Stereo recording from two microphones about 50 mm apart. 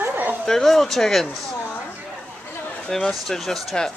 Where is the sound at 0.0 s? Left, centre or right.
Right.